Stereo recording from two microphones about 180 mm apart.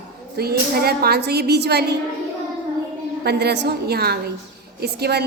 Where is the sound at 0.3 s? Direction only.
60° right (ahead or behind).